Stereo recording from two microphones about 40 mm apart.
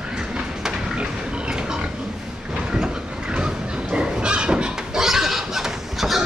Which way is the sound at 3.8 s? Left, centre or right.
Centre.